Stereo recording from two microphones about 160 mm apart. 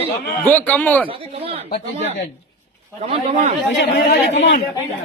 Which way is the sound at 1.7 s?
55° left (ahead or behind).